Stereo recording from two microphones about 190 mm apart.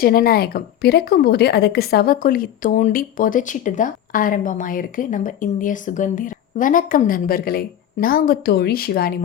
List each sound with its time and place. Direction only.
0.0 s a woman's voice: 50° left (ahead or behind)